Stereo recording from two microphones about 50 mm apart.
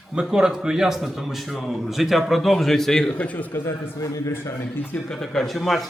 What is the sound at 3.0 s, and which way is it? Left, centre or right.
Speech, left.